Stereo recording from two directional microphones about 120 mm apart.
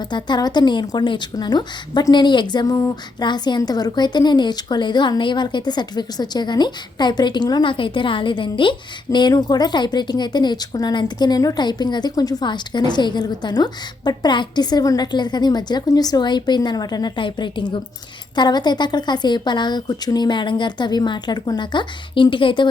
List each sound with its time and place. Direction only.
0.1 s speech: 35° left (ahead or behind)